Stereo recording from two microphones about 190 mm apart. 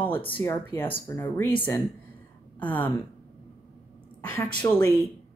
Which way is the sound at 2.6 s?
10° left (ahead or behind).